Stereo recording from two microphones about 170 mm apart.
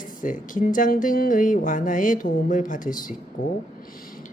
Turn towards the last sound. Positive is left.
turn(degrees=50)  # may be behind; listen again after turning